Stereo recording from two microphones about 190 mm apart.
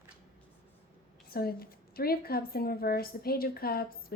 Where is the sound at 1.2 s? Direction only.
50° left (ahead or behind).